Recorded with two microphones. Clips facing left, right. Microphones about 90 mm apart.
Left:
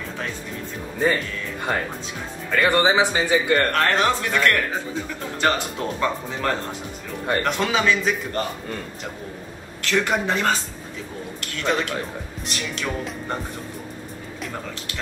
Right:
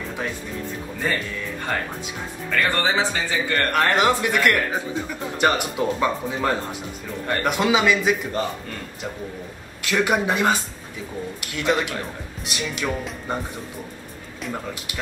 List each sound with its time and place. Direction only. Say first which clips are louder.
1.7 s speech: left 2 dB; 15° left (ahead or behind)
3.7 s speech: right 1 dB; 15° right (ahead or behind)
9.8 s speech: right 1 dB; 10° right (ahead or behind)